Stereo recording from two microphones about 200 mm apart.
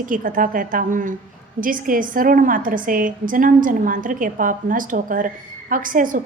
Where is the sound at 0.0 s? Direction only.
45° right (ahead or behind).